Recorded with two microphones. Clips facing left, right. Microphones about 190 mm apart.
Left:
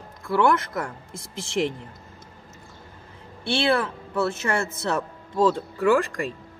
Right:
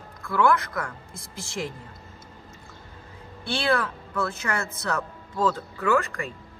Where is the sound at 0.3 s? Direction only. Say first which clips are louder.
Left 1 dB; 30° left (ahead or behind).